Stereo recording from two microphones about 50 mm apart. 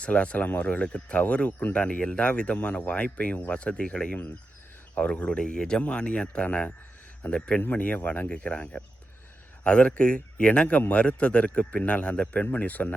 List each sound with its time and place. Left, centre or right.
0.0 s speech: left